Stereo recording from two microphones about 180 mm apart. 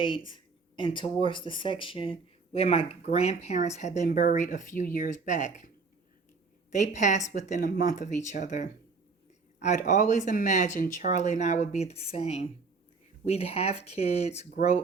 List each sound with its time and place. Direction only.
0.3 s speech: 25° left (ahead or behind)